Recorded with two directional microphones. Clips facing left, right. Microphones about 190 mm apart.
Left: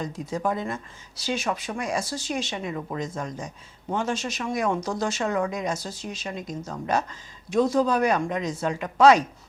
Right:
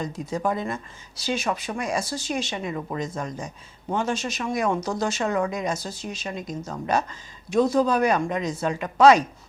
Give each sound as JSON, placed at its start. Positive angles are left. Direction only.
{"t": 0.0, "sound": "speech", "side_deg": -20}
{"t": 4.4, "sound": "speech", "side_deg": -20}